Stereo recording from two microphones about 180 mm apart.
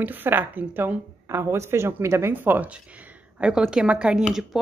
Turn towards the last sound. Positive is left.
turn(degrees=-5)  # may be behind; listen again after turning